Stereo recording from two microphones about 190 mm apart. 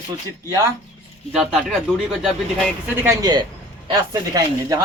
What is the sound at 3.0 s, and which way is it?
Speech, 20° right (ahead or behind).